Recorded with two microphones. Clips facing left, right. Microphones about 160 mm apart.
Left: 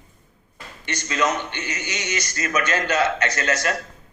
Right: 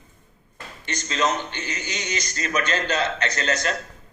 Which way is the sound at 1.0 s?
55° left (ahead or behind).